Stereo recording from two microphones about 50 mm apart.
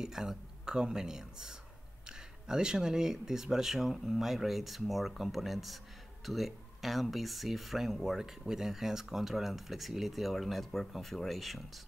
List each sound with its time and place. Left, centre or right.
0.0 s speech: centre